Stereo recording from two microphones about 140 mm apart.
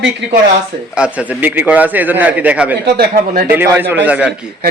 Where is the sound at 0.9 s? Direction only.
10° right (ahead or behind).